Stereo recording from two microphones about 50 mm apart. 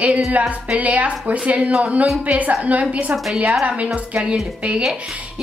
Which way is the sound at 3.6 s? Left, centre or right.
Right.